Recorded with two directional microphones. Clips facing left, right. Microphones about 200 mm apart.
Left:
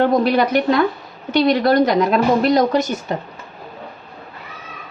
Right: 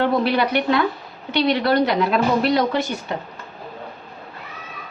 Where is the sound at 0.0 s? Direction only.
45° left (ahead or behind).